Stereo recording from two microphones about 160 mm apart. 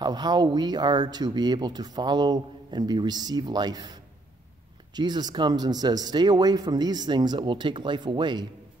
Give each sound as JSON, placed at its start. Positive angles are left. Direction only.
{"t": 0.0, "sound": "speech", "side_deg": -25}